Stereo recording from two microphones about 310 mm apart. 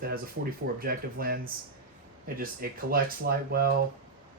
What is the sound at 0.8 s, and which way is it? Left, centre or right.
Speech, right.